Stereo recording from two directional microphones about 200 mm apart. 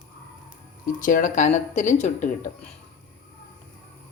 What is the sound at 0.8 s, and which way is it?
Speech, 40° left (ahead or behind).